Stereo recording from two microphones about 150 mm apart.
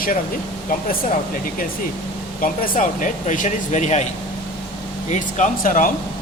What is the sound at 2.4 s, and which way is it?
Speech, 70° left (ahead or behind).